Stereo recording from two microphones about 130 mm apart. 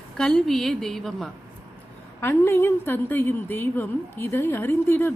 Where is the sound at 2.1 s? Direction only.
20° left (ahead or behind).